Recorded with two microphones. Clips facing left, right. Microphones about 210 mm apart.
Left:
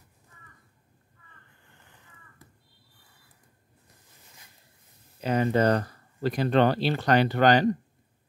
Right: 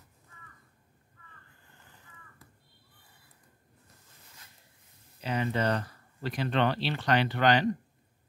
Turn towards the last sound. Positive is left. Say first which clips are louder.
# left 5 dB
turn(degrees=40)  # may be behind; listen again after turning